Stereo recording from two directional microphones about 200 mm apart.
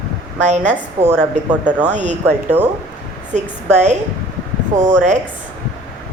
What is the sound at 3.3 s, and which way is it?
Speech, 35° right (ahead or behind).